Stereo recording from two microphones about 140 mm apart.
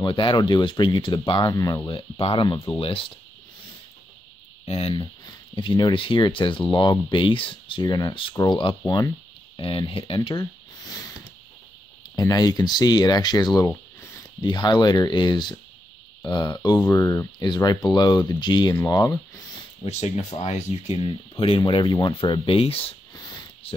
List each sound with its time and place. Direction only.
0.0 s speech: 35° left (ahead or behind)
4.6 s speech: 45° left (ahead or behind)
5.6 s speech: 35° left (ahead or behind)
9.6 s speech: 40° left (ahead or behind)
10.4 s a sound: 25° left (ahead or behind)
12.2 s speech: 25° left (ahead or behind)
19.8 s speech: 50° left (ahead or behind)
21.8 s speech: 30° left (ahead or behind)